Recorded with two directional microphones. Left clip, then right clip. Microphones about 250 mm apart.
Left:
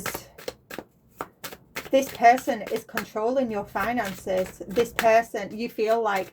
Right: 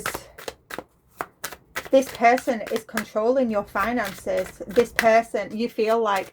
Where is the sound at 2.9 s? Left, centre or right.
Right.